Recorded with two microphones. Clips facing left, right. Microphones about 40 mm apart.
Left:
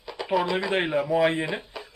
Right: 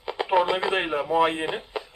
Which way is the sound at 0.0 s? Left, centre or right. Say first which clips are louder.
Right 3 dB; right.